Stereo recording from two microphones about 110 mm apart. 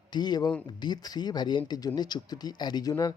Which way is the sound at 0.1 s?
40° left (ahead or behind).